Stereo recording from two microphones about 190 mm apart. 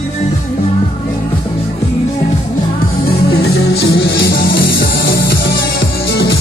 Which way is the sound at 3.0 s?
55° left (ahead or behind).